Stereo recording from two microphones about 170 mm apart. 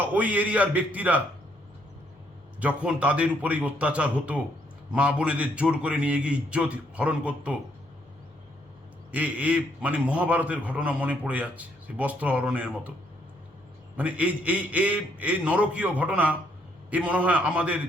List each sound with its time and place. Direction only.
0.0 s a man's voice: 10° right (ahead or behind)
2.6 s a man's voice: 10° right (ahead or behind)
9.1 s a man's voice: 10° right (ahead or behind)
13.9 s a man's voice: 10° right (ahead or behind)